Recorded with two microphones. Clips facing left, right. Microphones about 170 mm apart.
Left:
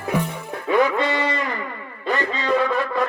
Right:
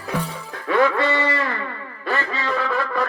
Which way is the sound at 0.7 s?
15° left (ahead or behind).